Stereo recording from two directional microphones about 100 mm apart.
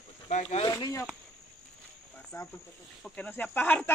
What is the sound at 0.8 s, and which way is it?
Insect, 30° left (ahead or behind).